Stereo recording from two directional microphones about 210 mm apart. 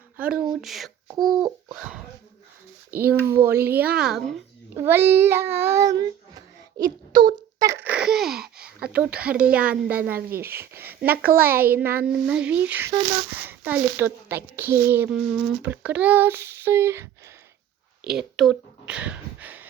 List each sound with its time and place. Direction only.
0.2 s speech: 5° right (ahead or behind)
1.2 s a sound: 20° right (ahead or behind)
1.7 s speech: 5° right (ahead or behind)
3.2 s a child's voice: 10° right (ahead or behind)
11.3 s a child's voice: 45° right (ahead or behind)
11.6 s speech: 10° right (ahead or behind)
18.2 s speech: centre (ahead or behind)